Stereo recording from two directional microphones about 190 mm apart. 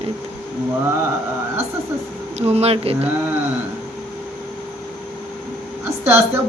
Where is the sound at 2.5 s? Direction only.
30° right (ahead or behind).